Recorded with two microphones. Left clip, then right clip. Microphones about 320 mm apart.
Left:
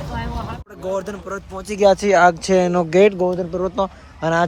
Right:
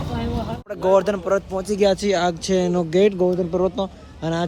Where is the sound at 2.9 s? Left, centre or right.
Centre.